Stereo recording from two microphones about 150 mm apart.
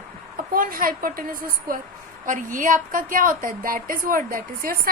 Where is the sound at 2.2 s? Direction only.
60° right (ahead or behind).